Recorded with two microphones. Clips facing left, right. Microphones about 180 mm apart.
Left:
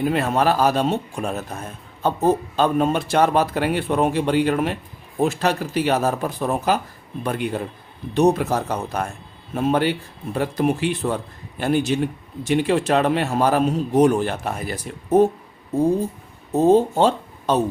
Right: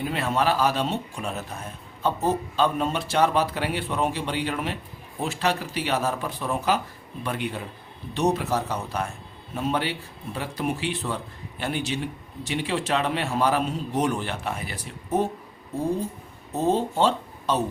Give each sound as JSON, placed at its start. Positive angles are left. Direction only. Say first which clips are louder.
{"t": 0.1, "sound": "speech", "louder": "left 5 dB", "side_deg": 45}
{"t": 16.6, "sound": "speech", "louder": "left 7 dB", "side_deg": 45}